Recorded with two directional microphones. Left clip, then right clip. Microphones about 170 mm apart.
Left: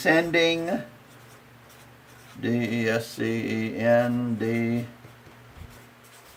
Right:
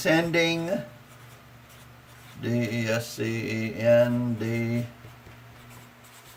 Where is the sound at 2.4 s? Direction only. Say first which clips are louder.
Left 3 dB; 25° left (ahead or behind).